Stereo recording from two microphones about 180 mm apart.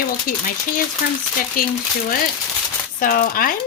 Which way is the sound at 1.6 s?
50° left (ahead or behind).